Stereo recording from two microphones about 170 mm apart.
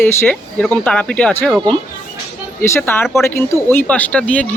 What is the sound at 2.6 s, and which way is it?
Speech, 15° left (ahead or behind).